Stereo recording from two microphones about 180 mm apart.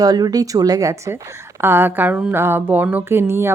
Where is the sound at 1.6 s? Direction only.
10° right (ahead or behind).